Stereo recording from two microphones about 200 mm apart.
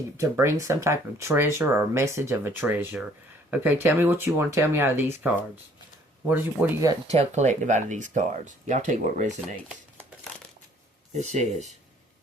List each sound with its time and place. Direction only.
0.2 s speech: 15° right (ahead or behind)
7.1 s speech: 35° right (ahead or behind)
11.1 s speech: 35° right (ahead or behind)